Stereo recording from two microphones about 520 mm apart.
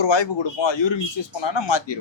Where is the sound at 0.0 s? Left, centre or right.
Left.